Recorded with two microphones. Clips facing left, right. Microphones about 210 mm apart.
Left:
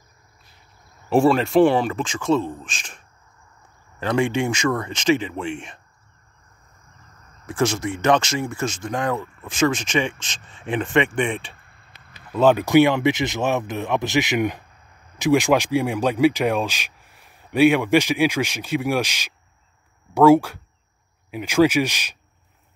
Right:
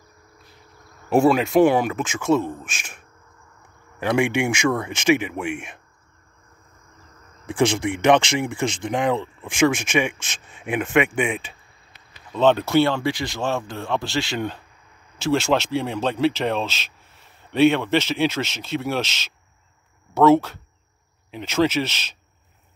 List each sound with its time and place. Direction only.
1.2 s speech: 5° right (ahead or behind)
4.0 s speech: 10° right (ahead or behind)
7.4 s speech: 15° right (ahead or behind)
12.3 s speech: 10° left (ahead or behind)